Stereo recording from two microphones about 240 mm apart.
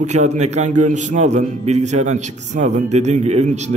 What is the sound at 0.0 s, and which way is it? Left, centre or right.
A man's voice, right.